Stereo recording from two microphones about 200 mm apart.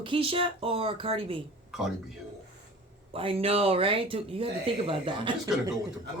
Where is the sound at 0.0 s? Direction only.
25° right (ahead or behind).